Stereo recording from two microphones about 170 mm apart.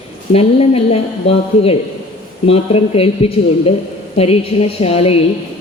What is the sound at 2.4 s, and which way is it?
A woman's voice, 35° left (ahead or behind).